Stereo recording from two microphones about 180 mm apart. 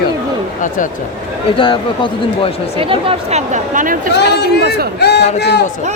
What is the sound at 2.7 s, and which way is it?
A woman's voice, 30° right (ahead or behind).